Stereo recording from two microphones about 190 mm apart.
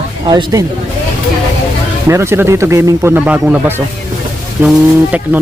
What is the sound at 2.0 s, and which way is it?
Speech, 15° right (ahead or behind).